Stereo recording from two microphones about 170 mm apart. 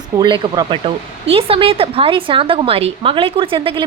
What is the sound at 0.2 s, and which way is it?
A woman's voice, 25° right (ahead or behind).